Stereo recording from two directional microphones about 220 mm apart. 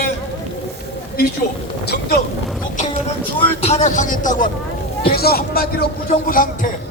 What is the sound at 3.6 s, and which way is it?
Speech, 30° left (ahead or behind).